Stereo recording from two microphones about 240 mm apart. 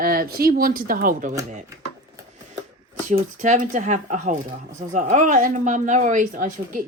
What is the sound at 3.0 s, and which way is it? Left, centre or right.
Speech, right.